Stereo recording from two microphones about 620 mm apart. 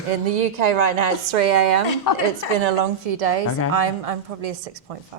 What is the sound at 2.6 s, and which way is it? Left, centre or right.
A woman's voice, right.